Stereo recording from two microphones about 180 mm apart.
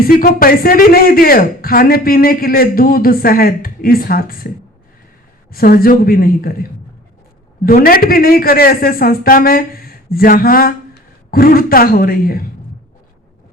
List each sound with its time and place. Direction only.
0.1 s speech: 55° left (ahead or behind)
5.5 s speech: 55° left (ahead or behind)